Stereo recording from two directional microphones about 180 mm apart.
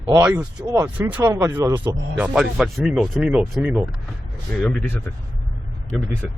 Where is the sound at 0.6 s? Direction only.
20° right (ahead or behind).